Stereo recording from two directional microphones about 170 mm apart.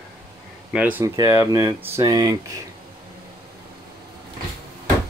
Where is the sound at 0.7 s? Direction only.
10° right (ahead or behind).